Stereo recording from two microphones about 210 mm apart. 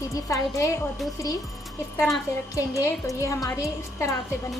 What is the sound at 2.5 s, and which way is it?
A woman's voice, 15° left (ahead or behind).